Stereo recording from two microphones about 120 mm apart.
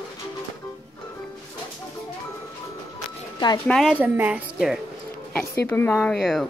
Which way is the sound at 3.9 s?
15° right (ahead or behind).